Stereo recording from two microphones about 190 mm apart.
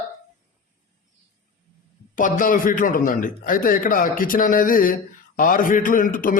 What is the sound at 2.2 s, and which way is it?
A man's voice, 45° left (ahead or behind).